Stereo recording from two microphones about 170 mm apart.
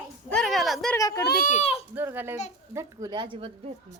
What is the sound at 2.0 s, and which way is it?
A child's voice, 15° right (ahead or behind).